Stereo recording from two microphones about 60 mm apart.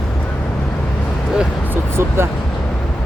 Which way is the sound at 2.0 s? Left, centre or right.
Right.